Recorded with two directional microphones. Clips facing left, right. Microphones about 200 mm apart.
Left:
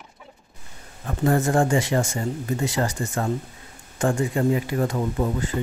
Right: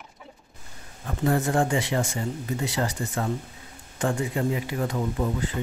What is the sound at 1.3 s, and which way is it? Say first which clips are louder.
Speech: left 3 dB; 45° left (ahead or behind).